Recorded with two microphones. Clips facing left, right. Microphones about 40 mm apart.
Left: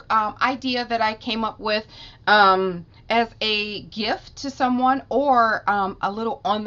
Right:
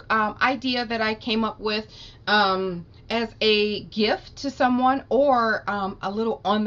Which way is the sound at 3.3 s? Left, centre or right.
Centre.